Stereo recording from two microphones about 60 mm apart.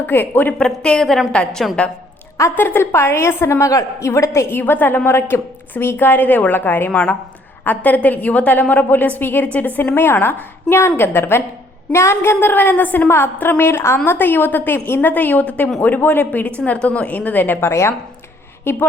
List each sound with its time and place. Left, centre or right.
0.0 s a woman's voice: left
0.6 s speech: centre
2.6 s a woman's voice: left
3.7 s a woman's voice: left
6.9 s a woman's voice: left
9.9 s a woman's voice: left
13.1 s a woman's voice: left
13.4 s a woman's voice: left
13.7 s a woman's voice: left
15.1 s a woman's voice: left
16.6 s a woman's voice: left
17.7 s a woman's voice: left
18.6 s a woman's voice: left